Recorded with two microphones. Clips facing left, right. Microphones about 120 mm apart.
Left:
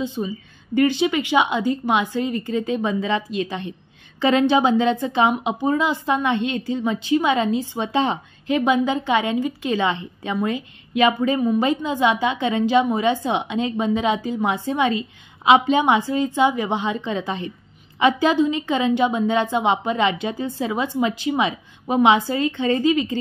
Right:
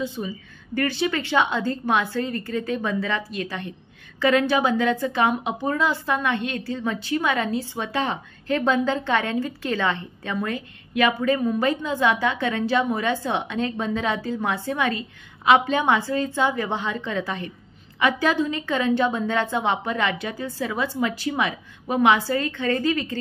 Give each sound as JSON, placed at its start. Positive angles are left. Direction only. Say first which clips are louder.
{"t": 0.0, "sound": "a woman's voice", "louder": "left 3 dB", "side_deg": 15}